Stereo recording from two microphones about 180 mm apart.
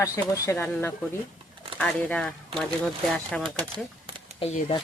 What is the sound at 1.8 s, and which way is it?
Speech, 5° left (ahead or behind).